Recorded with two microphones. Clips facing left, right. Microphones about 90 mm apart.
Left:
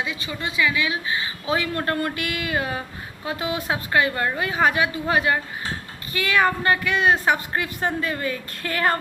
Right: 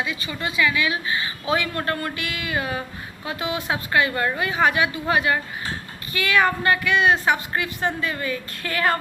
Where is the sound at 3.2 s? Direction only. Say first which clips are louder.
Left 1 dB; 35° left (ahead or behind).